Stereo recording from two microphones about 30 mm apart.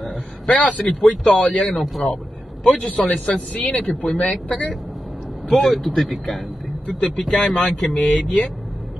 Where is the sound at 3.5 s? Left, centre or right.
Left.